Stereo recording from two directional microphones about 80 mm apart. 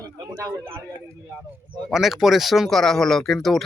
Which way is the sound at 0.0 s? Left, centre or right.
Right.